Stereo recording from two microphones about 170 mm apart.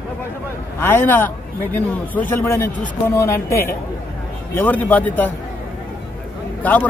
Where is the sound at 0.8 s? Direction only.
10° left (ahead or behind).